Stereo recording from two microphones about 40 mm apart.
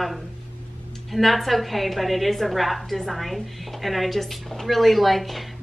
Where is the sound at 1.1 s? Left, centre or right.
Centre.